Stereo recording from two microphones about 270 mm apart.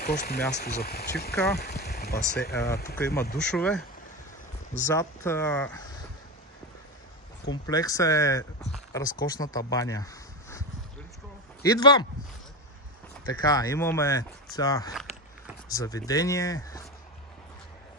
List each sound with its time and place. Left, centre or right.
0.0 s speech: left
3.3 s speech: centre
4.9 s speech: centre
7.4 s speech: centre
11.6 s speech: centre
13.2 s speech: centre